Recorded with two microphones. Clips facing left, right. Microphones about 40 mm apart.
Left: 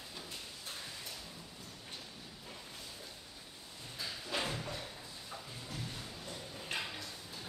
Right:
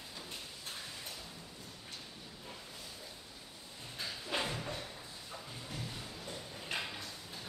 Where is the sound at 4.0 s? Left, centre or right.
Centre.